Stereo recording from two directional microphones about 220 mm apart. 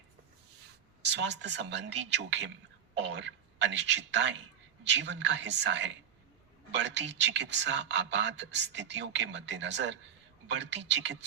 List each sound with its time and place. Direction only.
1.0 s a woman's voice: 50° right (ahead or behind)